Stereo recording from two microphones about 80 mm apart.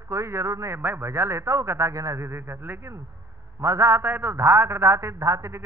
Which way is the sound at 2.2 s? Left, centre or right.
Right.